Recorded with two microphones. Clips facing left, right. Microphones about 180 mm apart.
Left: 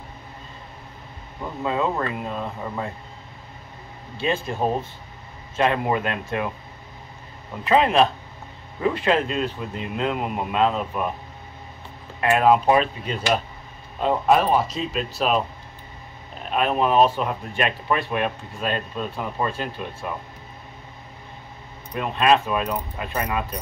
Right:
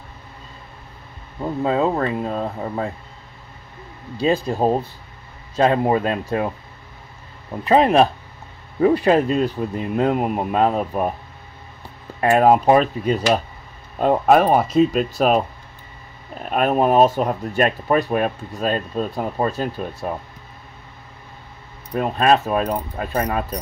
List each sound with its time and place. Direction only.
1.6 s speech: 35° right (ahead or behind)
4.2 s speech: 35° right (ahead or behind)
5.7 s speech: 35° right (ahead or behind)
7.6 s speech: 40° right (ahead or behind)
12.2 s speech: 40° right (ahead or behind)
13.9 s speech: 50° right (ahead or behind)
16.4 s speech: 45° right (ahead or behind)
21.9 s speech: 45° right (ahead or behind)